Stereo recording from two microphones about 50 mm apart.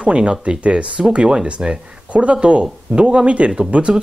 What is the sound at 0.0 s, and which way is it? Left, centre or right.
Speech, centre.